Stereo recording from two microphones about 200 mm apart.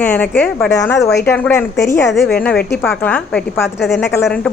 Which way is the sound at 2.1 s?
Centre (ahead or behind).